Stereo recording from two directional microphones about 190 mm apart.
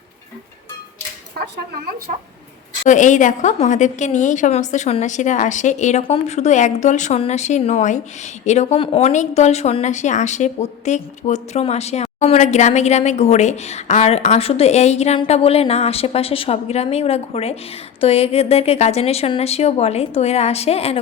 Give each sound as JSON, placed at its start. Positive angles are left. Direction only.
{"t": 1.4, "sound": "speech", "side_deg": -55}
{"t": 2.8, "sound": "a woman's voice", "side_deg": 40}